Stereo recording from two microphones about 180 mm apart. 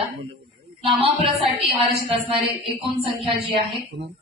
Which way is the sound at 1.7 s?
30° right (ahead or behind).